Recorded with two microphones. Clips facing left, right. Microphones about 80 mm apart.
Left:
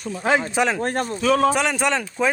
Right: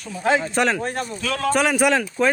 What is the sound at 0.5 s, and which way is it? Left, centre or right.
Speech, centre.